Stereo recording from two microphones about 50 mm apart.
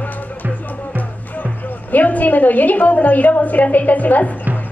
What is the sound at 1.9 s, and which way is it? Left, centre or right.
A woman's voice, left.